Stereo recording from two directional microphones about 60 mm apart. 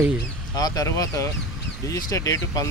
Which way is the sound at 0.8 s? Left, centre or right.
Left.